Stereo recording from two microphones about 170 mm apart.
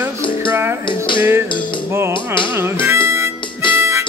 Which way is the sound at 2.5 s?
15° right (ahead or behind).